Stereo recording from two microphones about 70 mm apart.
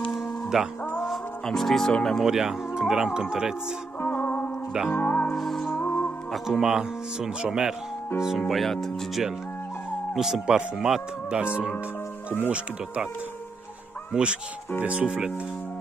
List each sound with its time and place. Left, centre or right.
0.1 s music: centre
1.0 s speech: centre
2.2 s speech: centre
4.0 s music: left
4.9 s speech: left
5.4 s speech: centre
5.8 s music: left
6.3 s speech: centre
8.5 s speech: centre
12.4 s speech: centre
14.1 s speech: centre